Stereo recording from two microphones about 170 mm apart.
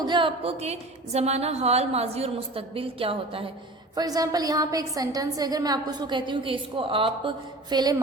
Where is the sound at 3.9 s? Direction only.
20° right (ahead or behind).